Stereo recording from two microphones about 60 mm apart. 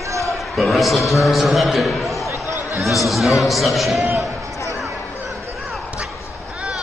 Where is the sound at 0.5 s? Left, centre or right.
Centre.